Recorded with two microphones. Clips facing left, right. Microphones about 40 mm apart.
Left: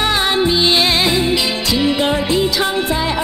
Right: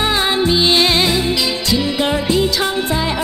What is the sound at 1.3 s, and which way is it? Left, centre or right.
Music, centre.